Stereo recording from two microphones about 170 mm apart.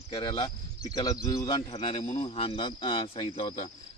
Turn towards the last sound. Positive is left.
turn(degrees=35)  # may be behind; listen again after turning